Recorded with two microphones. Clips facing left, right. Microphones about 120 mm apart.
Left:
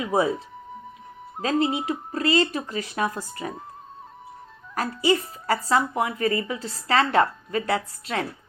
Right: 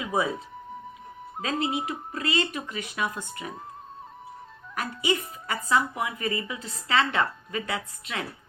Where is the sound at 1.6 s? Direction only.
30° left (ahead or behind).